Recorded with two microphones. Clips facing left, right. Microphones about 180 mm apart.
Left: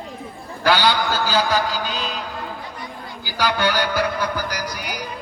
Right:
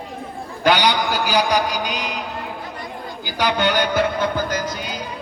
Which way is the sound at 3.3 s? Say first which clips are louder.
Right 1 dB; 20° right (ahead or behind).